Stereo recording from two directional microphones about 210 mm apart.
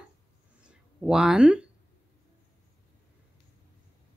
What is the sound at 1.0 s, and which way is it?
Speech, 5° right (ahead or behind).